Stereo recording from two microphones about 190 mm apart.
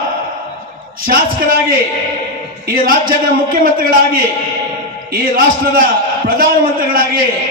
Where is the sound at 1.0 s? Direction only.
50° right (ahead or behind).